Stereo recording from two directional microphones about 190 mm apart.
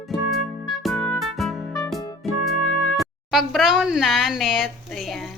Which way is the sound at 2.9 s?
Centre (ahead or behind).